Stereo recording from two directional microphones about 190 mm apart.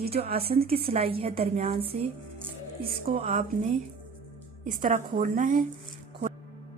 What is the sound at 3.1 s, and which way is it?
Speech, 35° right (ahead or behind).